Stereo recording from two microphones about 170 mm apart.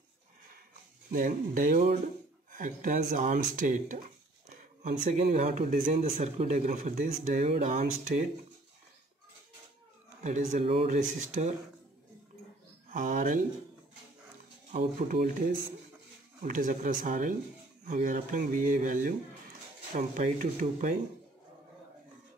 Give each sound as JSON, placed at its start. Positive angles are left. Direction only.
{"t": 1.1, "sound": "speech", "side_deg": -50}
{"t": 5.3, "sound": "speech", "side_deg": -45}
{"t": 10.2, "sound": "speech", "side_deg": -45}
{"t": 12.9, "sound": "speech", "side_deg": -50}
{"t": 14.7, "sound": "speech", "side_deg": -50}